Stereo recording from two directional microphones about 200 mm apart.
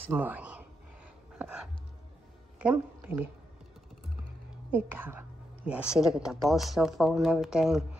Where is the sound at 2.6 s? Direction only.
5° right (ahead or behind).